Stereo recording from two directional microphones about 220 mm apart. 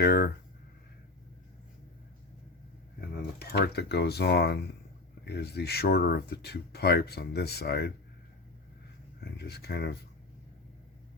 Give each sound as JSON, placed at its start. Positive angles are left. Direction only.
{"t": 0.0, "sound": "a sound", "side_deg": 45}
{"t": 3.3, "sound": "speech", "side_deg": 45}
{"t": 9.4, "sound": "speech", "side_deg": 45}